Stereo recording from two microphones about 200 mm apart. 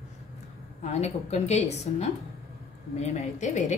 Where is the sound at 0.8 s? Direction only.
35° left (ahead or behind).